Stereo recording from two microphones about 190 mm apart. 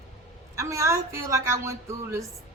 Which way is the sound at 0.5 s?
15° right (ahead or behind).